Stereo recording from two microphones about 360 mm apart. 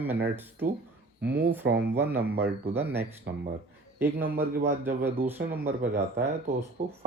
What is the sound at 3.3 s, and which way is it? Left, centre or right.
Speech, right.